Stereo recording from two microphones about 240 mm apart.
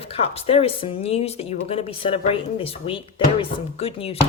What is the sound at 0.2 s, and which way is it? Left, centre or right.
Speech, left.